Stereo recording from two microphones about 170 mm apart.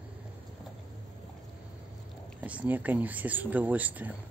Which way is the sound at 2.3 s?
10° right (ahead or behind).